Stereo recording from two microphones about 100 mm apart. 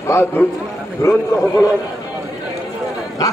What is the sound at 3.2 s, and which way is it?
Speech, 35° left (ahead or behind).